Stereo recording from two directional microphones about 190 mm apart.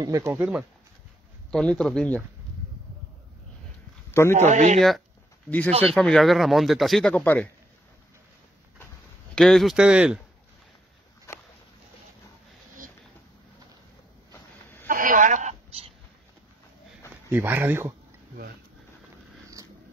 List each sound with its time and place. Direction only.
0.0 s speech: 15° right (ahead or behind)
1.5 s speech: 5° left (ahead or behind)
4.1 s a man's voice: 15° left (ahead or behind)
4.4 s speech: 40° right (ahead or behind)
4.7 s speech: centre (ahead or behind)
9.3 s speech: centre (ahead or behind)
14.9 s a sound: 45° right (ahead or behind)
17.3 s speech: 10° right (ahead or behind)